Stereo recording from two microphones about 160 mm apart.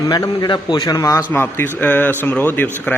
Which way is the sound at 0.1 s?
25° left (ahead or behind).